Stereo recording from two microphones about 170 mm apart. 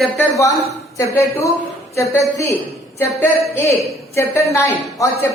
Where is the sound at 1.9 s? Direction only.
15° left (ahead or behind).